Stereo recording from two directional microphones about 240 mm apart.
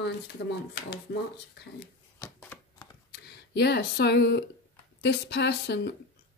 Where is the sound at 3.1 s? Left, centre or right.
Left.